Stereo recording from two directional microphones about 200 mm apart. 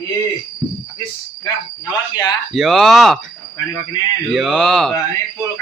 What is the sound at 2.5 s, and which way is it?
Speech, centre (ahead or behind).